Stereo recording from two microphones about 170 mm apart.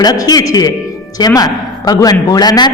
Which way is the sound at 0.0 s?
25° left (ahead or behind).